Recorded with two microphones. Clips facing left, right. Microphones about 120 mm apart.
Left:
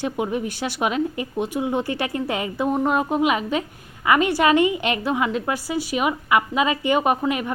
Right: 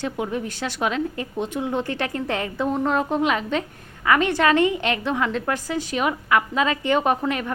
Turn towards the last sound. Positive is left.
turn(degrees=10)  # may be behind; listen again after turning